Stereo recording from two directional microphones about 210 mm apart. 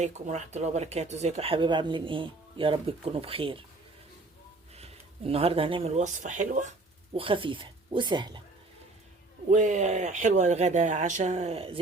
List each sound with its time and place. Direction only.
0.0 s speech: 35° right (ahead or behind)
4.8 s speech: 30° right (ahead or behind)
9.5 s speech: 35° right (ahead or behind)